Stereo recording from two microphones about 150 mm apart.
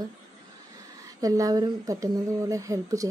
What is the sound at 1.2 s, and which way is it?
A woman's voice, 25° right (ahead or behind).